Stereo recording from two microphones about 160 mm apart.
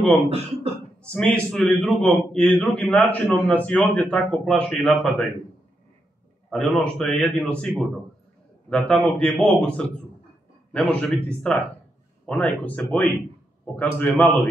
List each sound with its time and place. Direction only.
0.1 s speech: 35° right (ahead or behind)
1.0 s a man's voice: 5° left (ahead or behind)
6.5 s a man's voice: 5° left (ahead or behind)